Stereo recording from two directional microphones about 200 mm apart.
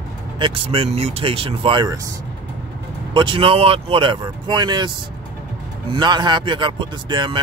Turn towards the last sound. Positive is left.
turn(degrees=-25)  # may be behind; listen again after turning